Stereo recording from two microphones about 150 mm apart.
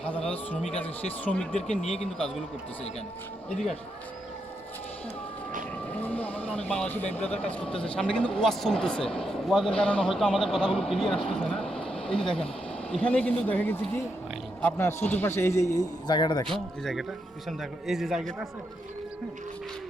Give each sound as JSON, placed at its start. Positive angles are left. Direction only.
{"t": 0.8, "sound": "a man's voice", "side_deg": 10}
{"t": 5.9, "sound": "vehicle", "side_deg": 10}
{"t": 6.7, "sound": "a man's voice", "side_deg": 10}
{"t": 16.5, "sound": "a man's voice", "side_deg": 0}